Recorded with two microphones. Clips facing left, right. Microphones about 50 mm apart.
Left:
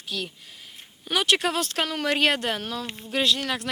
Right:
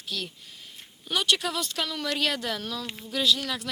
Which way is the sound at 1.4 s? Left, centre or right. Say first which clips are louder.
Left 5 dB; left.